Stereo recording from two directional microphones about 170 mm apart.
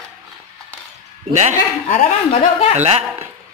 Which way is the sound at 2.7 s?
40° right (ahead or behind).